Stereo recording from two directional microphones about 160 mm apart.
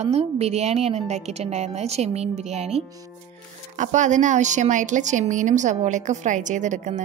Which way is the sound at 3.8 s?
50° right (ahead or behind).